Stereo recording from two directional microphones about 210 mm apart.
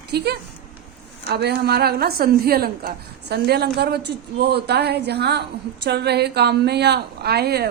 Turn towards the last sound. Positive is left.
turn(degrees=-50)  # may be behind; listen again after turning